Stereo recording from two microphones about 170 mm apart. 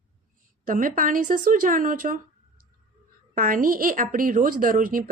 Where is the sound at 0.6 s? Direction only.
50° right (ahead or behind).